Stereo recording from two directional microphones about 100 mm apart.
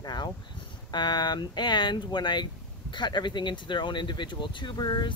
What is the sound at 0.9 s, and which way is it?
Speech, 45° left (ahead or behind).